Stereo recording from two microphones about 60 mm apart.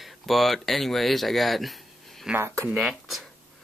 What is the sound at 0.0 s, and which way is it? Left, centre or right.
Speech, centre.